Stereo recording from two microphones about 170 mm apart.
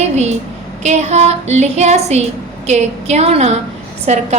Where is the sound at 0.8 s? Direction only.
40° right (ahead or behind).